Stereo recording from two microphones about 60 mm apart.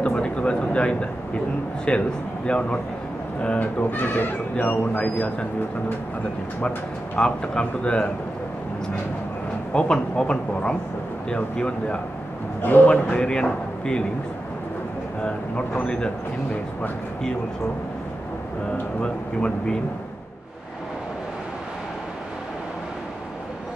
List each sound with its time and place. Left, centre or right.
0.0 s a sound: centre
1.9 s a man's voice: centre
3.9 s speech: left
7.2 s a man's voice: centre
9.7 s a man's voice: centre
15.8 s a man's voice: centre
18.7 s a man's voice: centre